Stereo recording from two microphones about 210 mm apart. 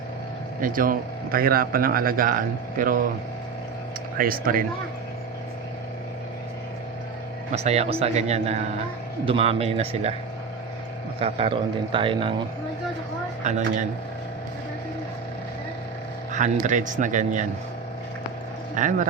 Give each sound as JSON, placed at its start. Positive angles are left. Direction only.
{"t": 0.6, "sound": "a man's voice", "side_deg": -40}
{"t": 4.2, "sound": "a man's voice", "side_deg": -45}
{"t": 7.5, "sound": "a man's voice", "side_deg": -30}
{"t": 11.2, "sound": "a man's voice", "side_deg": -25}
{"t": 13.4, "sound": "a man's voice", "side_deg": -35}
{"t": 16.3, "sound": "a man's voice", "side_deg": -35}
{"t": 18.7, "sound": "a man's voice", "side_deg": -35}